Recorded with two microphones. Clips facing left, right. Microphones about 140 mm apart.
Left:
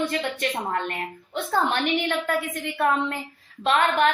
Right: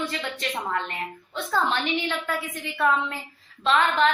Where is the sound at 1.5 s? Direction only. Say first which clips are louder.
Left 2 dB; 50° left (ahead or behind).